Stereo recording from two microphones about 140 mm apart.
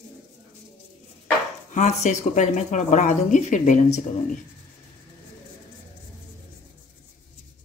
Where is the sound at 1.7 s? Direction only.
55° left (ahead or behind).